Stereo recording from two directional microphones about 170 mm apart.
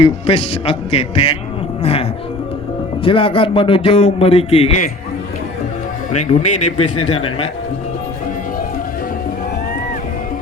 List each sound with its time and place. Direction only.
0.0 s a man's voice: 35° left (ahead or behind)
6.1 s a man's voice: 40° left (ahead or behind)